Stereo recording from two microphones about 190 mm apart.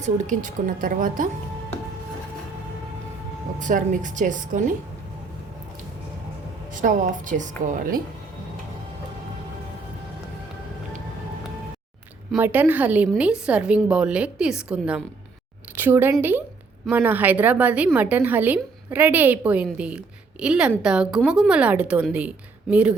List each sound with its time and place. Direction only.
0.0 s a woman's voice: 40° right (ahead or behind)
3.6 s a woman's voice: 40° right (ahead or behind)
6.8 s a woman's voice: 40° right (ahead or behind)
12.4 s a woman's voice: 10° right (ahead or behind)